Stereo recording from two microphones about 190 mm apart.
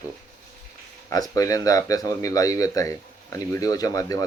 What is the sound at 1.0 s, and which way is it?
Speech, 20° left (ahead or behind).